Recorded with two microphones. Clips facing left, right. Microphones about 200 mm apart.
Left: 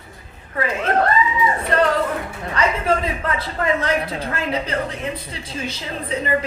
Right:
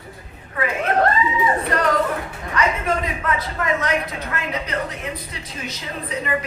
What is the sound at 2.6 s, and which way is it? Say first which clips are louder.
Speech: left 2 dB; 30° left (ahead or behind).